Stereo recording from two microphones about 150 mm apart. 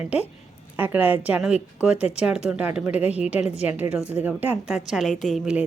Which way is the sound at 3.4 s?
45° left (ahead or behind).